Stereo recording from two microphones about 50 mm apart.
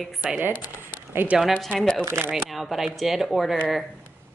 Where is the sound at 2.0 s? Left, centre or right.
Right.